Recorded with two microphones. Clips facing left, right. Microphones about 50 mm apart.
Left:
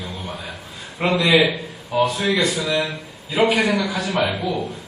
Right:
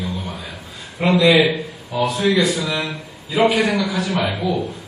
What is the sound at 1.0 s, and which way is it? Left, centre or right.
Speech, left.